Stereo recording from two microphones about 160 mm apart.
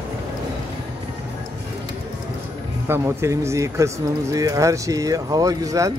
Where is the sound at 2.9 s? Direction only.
15° right (ahead or behind).